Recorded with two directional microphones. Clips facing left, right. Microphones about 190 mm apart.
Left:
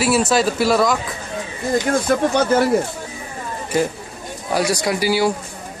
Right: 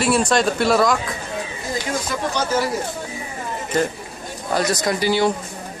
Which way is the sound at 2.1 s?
55° left (ahead or behind).